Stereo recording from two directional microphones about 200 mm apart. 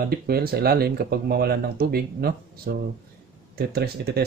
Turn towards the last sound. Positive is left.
turn(degrees=-55)  # may be behind; listen again after turning